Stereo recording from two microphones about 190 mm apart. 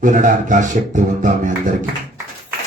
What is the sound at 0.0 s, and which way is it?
Music, 45° right (ahead or behind).